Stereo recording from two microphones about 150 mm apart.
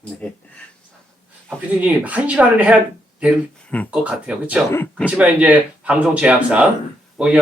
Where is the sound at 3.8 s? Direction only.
10° right (ahead or behind).